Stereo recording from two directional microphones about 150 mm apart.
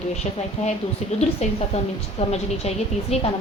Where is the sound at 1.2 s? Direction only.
45° left (ahead or behind).